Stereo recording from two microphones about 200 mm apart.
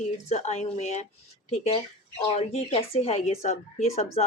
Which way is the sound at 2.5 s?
30° left (ahead or behind).